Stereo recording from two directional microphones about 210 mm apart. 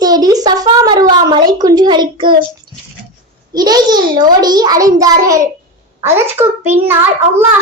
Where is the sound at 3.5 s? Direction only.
20° right (ahead or behind).